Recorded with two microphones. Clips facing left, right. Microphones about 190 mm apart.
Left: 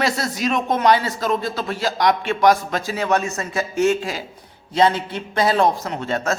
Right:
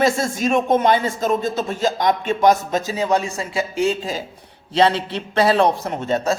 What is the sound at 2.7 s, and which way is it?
Speech, 40° right (ahead or behind).